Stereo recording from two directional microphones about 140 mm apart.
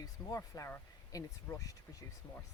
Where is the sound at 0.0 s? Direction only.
25° left (ahead or behind).